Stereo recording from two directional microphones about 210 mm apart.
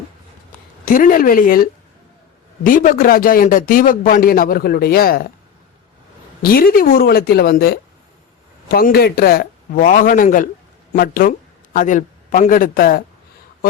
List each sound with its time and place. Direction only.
0.9 s a man's voice: 40° left (ahead or behind)
6.4 s a man's voice: 45° left (ahead or behind)